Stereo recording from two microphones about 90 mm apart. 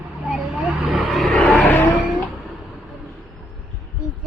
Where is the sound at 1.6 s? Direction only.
25° left (ahead or behind).